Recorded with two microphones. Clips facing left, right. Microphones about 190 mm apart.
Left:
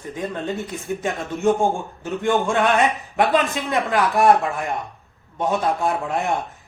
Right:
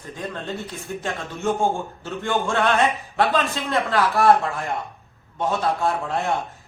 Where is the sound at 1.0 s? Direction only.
15° left (ahead or behind).